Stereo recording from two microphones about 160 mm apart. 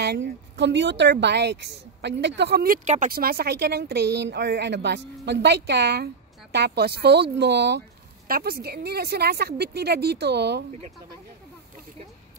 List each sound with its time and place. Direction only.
0.0 s speech: 90° right; by 3.1 s 50° right (ahead or behind)
3.1 s speech: 70° right (ahead or behind); by 7.8 s 90° right
8.3 s speech: 70° right (ahead or behind); by 10.6 s 90° right